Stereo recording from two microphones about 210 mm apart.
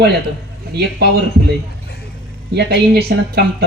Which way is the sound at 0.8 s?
50° right (ahead or behind).